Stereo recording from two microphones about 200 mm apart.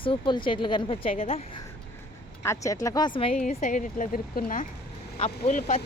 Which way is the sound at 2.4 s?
15° left (ahead or behind).